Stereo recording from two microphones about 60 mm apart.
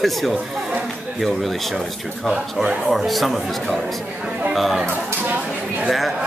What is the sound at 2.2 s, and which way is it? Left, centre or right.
Speech, centre.